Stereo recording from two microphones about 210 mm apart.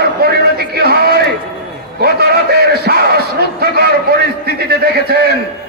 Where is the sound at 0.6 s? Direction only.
50° right (ahead or behind).